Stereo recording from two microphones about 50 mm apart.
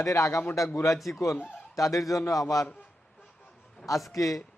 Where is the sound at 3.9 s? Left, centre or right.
Left.